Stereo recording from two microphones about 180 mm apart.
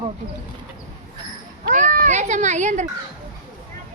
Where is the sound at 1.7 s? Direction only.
50° right (ahead or behind).